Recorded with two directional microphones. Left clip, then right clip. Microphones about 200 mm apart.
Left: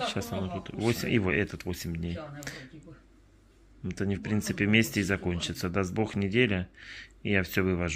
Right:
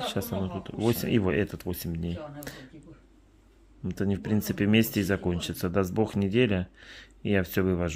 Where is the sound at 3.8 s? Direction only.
25° right (ahead or behind).